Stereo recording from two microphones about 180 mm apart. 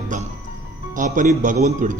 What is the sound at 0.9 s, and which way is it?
A man's voice, 45° right (ahead or behind).